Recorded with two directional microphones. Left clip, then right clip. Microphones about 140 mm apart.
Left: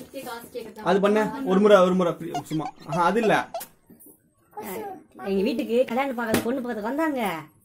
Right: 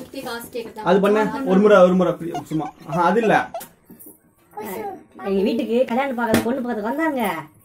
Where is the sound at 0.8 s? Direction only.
30° left (ahead or behind); by 2.3 s 45° left (ahead or behind).